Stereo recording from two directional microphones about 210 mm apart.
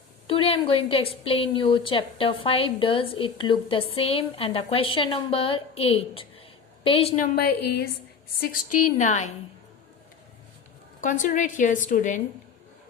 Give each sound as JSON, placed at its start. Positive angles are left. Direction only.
{"t": 0.3, "sound": "a woman's voice", "side_deg": 25}
{"t": 7.3, "sound": "a woman's voice", "side_deg": 50}
{"t": 11.0, "sound": "a woman's voice", "side_deg": 40}